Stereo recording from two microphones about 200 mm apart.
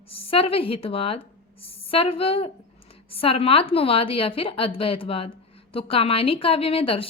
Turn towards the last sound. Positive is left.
turn(degrees=30)  # may be behind; listen again after turning